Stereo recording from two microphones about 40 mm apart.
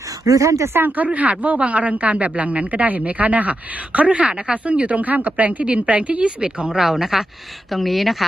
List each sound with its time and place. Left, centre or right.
0.9 s speech: right
5.5 s a woman's voice: right
6.7 s speech: centre